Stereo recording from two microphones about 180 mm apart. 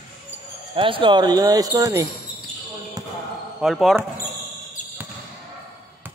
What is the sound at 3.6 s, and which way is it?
Speech, centre (ahead or behind).